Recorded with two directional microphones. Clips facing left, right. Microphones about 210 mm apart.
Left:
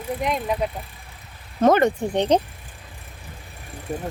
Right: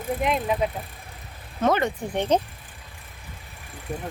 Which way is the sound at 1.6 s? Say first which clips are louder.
Left 6 dB; 45° left (ahead or behind).